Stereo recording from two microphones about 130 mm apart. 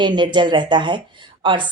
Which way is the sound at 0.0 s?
35° right (ahead or behind).